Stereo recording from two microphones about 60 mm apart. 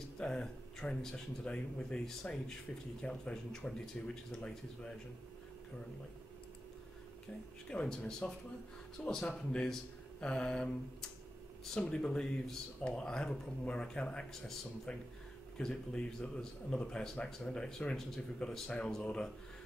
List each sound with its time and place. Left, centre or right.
0.2 s speech: centre
7.7 s speech: centre